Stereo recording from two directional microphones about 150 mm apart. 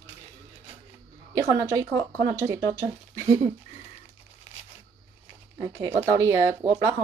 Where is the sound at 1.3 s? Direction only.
20° right (ahead or behind).